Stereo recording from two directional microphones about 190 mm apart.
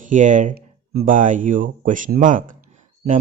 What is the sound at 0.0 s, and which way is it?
Speech, 40° right (ahead or behind).